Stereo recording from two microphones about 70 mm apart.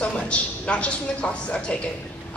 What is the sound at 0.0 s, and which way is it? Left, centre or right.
A woman's voice, centre.